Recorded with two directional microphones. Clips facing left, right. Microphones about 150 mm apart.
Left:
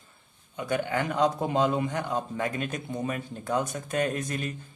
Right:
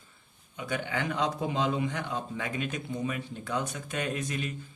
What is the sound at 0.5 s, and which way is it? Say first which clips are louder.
A man's voice: left 5 dB; 50° left (ahead or behind).